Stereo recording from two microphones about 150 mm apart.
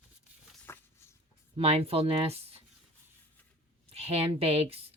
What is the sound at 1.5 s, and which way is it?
Speech, 45° right (ahead or behind).